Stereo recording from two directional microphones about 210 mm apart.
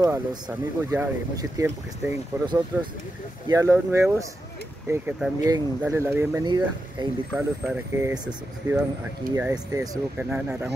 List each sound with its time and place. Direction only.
0.0 s speech: 20° right (ahead or behind)
7.3 s speech: 5° right (ahead or behind)